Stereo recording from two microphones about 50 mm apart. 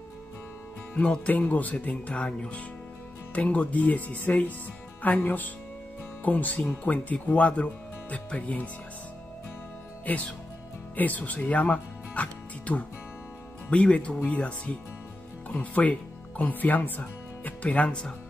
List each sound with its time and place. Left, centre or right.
0.9 s speech: left
10.0 s speech: left